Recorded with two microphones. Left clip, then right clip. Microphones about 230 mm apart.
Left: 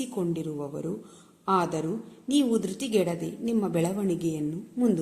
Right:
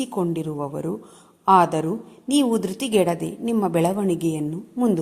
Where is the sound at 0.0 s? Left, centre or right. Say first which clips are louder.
Right 6 dB; right.